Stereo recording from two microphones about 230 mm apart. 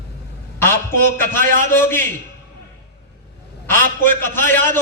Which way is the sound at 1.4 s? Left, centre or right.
Right.